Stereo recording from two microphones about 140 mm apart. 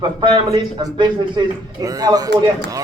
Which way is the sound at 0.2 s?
35° right (ahead or behind).